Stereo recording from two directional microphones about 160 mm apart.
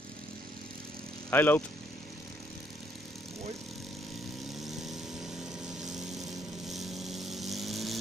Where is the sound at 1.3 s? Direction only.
15° left (ahead or behind).